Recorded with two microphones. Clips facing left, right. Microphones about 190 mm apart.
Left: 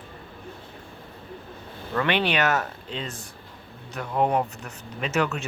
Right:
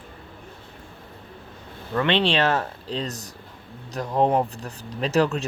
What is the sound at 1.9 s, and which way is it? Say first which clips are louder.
Speech: right 2 dB; 25° right (ahead or behind).